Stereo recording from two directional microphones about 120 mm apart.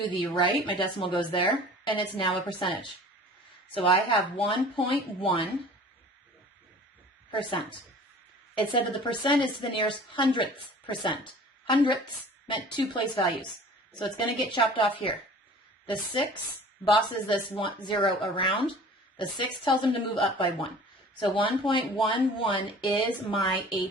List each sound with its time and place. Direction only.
0.0 s a woman's voice: 45° left (ahead or behind)
7.3 s a woman's voice: 45° left (ahead or behind)
16.8 s a woman's voice: 45° left (ahead or behind)